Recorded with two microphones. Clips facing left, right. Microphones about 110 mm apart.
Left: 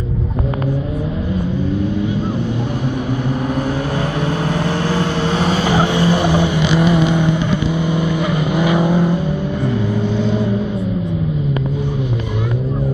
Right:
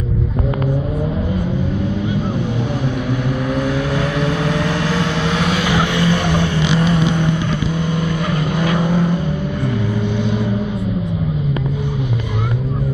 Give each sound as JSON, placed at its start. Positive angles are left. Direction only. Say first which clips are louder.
{"t": 4.6, "sound": "vehicle", "louder": "left 1 dB", "side_deg": 35}
{"t": 6.1, "sound": "vehicle", "louder": "left 2 dB", "side_deg": 10}
{"t": 8.5, "sound": "vehicle", "louder": "left 3 dB", "side_deg": 5}